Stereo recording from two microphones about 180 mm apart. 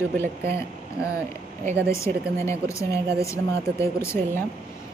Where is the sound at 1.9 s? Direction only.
15° left (ahead or behind).